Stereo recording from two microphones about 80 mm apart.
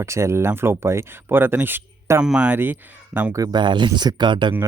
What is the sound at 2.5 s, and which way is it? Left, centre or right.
Speech, right.